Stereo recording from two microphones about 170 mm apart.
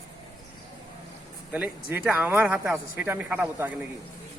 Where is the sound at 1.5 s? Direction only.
10° right (ahead or behind).